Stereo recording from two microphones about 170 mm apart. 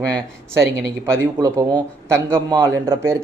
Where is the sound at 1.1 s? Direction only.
20° right (ahead or behind).